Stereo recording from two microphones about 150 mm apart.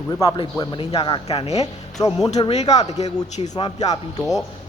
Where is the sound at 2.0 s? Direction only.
25° left (ahead or behind).